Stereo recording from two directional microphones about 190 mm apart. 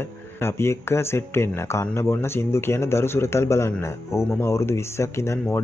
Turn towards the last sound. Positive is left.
turn(degrees=15)  # may be behind; listen again after turning